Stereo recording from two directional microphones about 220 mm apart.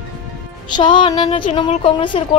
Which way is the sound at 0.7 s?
20° left (ahead or behind).